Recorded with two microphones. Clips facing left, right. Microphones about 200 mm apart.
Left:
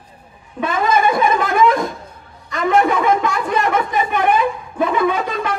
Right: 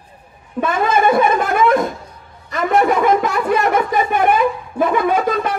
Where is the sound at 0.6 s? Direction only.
50° right (ahead or behind).